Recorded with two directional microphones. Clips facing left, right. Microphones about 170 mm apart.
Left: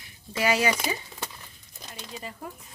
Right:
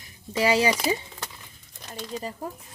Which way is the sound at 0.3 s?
30° right (ahead or behind).